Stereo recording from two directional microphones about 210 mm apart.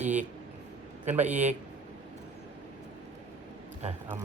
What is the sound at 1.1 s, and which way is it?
Mantra, 10° right (ahead or behind).